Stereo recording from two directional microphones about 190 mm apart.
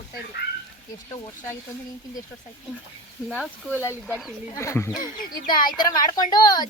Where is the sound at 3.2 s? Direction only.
Centre (ahead or behind).